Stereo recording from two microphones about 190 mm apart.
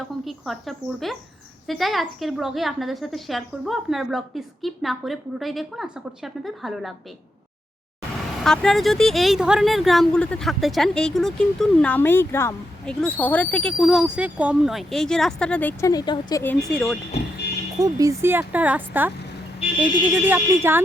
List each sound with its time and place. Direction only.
0.3 s speech: centre (ahead or behind)
8.4 s speech: centre (ahead or behind)
15.9 s speech: 20° left (ahead or behind)
16.4 s speech: 5° left (ahead or behind)
17.7 s speech: 20° right (ahead or behind)